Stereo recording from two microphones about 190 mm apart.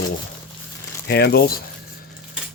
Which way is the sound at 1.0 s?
60° left (ahead or behind).